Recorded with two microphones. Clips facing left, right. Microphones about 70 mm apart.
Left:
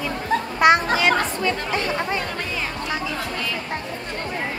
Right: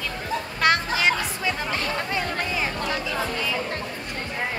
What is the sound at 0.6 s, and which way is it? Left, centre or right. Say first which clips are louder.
Speech: left 5 dB; centre.